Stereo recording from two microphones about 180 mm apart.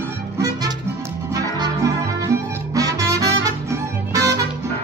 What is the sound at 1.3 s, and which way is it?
Music, 20° right (ahead or behind).